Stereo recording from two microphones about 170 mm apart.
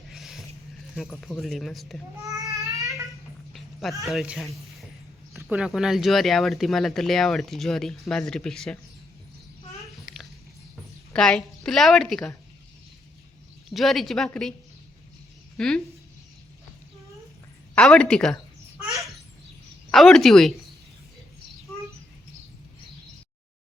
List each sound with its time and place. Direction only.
0.1 s a sound: centre (ahead or behind)
1.0 s speech: 5° left (ahead or behind)
2.2 s babbling: 20° right (ahead or behind)
3.5 s a sound: centre (ahead or behind)
4.0 s speech: centre (ahead or behind)
9.8 s a sound: centre (ahead or behind)
11.1 s speech: 5° left (ahead or behind)
13.7 s speech: centre (ahead or behind)
15.5 s speech: 5° left (ahead or behind)
17.7 s speech: 5° left (ahead or behind)
19.9 s speech: centre (ahead or behind)